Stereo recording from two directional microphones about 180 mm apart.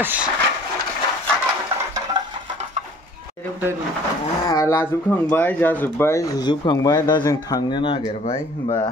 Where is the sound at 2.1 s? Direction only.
25° right (ahead or behind).